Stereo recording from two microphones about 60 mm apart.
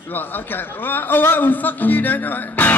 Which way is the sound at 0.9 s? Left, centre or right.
Left.